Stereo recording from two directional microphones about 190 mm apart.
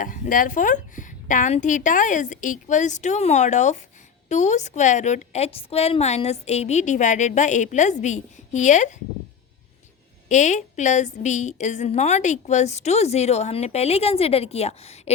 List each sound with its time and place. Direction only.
0.0 s a woman's voice: 45° left (ahead or behind)
10.2 s a woman's voice: 40° left (ahead or behind)